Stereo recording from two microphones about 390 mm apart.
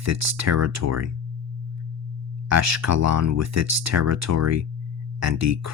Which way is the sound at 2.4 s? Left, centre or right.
Right.